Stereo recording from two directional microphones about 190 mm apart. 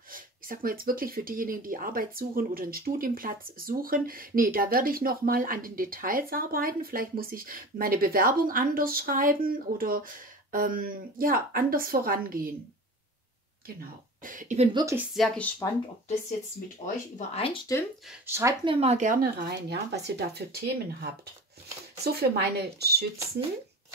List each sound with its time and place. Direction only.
0.1 s speech: 50° right (ahead or behind)
13.7 s speech: 45° right (ahead or behind)
14.7 s a woman's voice: 20° right (ahead or behind)
15.0 s speech: centre (ahead or behind)
17.2 s speech: 30° left (ahead or behind)
18.2 s speech: 15° right (ahead or behind)
18.6 s speech: 30° right (ahead or behind); by 23.0 s 60° right (ahead or behind)